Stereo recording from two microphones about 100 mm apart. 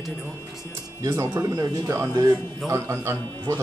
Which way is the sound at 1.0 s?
30° right (ahead or behind).